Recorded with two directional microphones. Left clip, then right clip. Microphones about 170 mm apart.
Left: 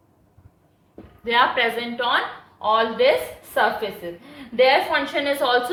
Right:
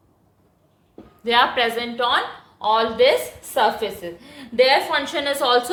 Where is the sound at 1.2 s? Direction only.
45° right (ahead or behind).